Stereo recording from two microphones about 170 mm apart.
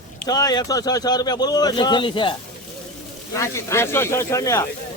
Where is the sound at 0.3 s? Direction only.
20° left (ahead or behind).